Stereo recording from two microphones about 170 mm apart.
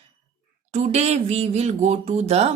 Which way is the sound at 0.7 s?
40° right (ahead or behind).